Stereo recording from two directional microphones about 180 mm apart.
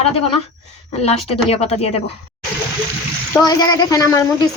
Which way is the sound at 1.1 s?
35° left (ahead or behind).